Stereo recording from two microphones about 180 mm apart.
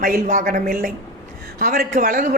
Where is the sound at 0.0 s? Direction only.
45° right (ahead or behind).